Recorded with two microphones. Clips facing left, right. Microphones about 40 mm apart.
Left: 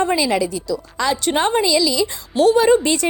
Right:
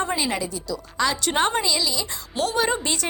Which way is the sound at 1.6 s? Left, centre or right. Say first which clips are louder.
Left 8 dB; left.